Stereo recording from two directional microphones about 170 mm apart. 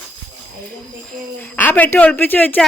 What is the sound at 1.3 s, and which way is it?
Speech, 10° left (ahead or behind).